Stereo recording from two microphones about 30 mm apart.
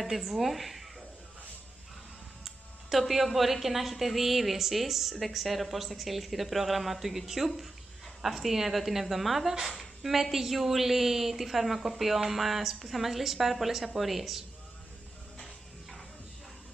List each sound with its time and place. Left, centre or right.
0.0 s speech: centre
2.4 s a sound: centre
3.3 s a woman's voice: centre
10.3 s a woman's voice: centre